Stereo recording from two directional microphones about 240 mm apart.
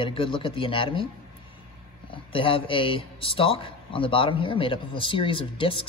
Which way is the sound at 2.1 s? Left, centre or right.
Left.